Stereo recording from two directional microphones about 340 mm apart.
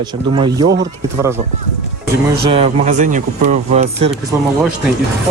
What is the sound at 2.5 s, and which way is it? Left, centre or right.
Speech, centre.